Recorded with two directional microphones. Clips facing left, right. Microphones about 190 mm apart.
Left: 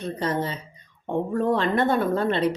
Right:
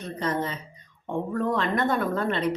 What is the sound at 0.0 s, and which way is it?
Speech, 30° left (ahead or behind).